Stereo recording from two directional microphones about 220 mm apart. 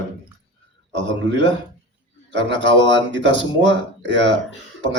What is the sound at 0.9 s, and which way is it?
A man's voice, 55° right (ahead or behind).